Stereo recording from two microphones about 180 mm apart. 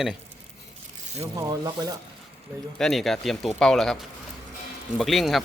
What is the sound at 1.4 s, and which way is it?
Speech, 20° right (ahead or behind).